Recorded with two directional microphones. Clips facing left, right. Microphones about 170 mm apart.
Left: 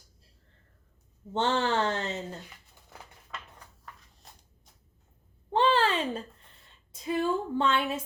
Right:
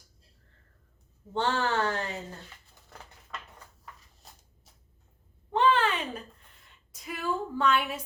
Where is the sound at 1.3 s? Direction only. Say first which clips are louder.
Left 1 dB; 20° left (ahead or behind).